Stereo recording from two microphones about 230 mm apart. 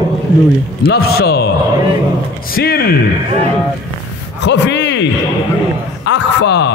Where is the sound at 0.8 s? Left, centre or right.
Left.